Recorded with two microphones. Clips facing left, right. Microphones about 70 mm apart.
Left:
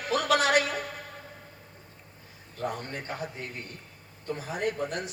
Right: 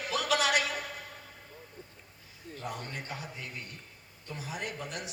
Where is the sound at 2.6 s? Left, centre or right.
Left.